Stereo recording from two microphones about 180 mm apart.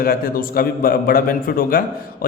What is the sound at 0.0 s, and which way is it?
A man's voice, 55° left (ahead or behind).